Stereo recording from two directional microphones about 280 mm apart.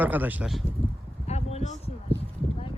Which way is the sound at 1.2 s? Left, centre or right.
Left.